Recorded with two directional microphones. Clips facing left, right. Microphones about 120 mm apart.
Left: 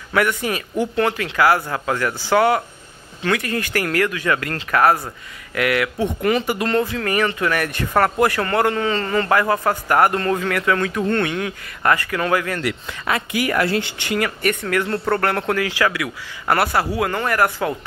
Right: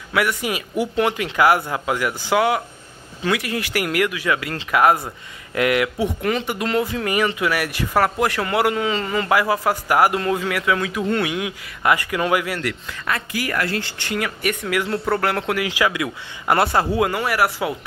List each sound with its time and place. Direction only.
0.1 s a man's voice: 5° right (ahead or behind); by 5.9 s 20° right (ahead or behind)
6.2 s speech: 5° left (ahead or behind)
6.8 s a man's voice: 15° right (ahead or behind)
13.0 s speech: 20° left (ahead or behind)
14.1 s speech: 5° right (ahead or behind)
15.6 s speech: 15° right (ahead or behind)
17.1 s a man's voice: 10° right (ahead or behind)